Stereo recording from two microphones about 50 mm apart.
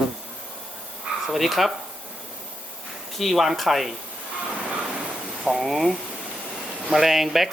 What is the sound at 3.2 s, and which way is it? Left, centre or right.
Speech, centre.